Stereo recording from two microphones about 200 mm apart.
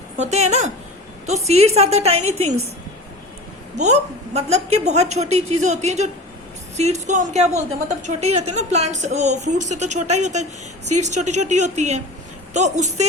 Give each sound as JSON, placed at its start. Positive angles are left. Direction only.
{"t": 0.2, "sound": "a woman's voice", "side_deg": -35}
{"t": 3.8, "sound": "a woman's voice", "side_deg": -35}